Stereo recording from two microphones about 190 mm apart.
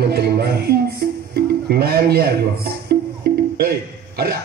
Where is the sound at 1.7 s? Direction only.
55° right (ahead or behind).